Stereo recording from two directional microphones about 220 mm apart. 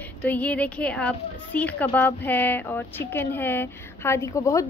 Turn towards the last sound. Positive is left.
turn(degrees=15)  # may be behind; listen again after turning